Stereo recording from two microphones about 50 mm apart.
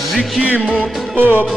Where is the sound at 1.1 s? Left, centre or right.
Right.